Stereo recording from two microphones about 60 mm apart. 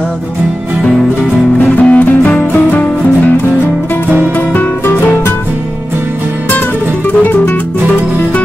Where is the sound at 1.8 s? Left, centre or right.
Left.